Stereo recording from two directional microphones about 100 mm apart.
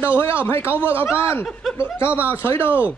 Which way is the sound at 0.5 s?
25° left (ahead or behind).